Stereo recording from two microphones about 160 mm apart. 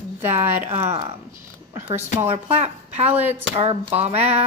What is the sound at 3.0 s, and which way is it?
Speech, 10° right (ahead or behind).